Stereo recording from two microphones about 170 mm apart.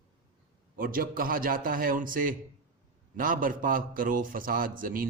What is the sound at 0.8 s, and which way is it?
A man's voice, 55° right (ahead or behind).